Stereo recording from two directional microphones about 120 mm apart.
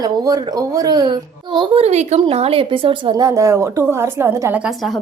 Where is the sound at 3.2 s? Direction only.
25° right (ahead or behind).